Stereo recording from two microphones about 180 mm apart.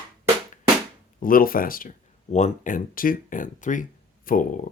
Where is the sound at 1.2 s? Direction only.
50° left (ahead or behind).